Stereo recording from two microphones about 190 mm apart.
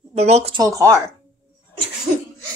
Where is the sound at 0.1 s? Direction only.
35° right (ahead or behind).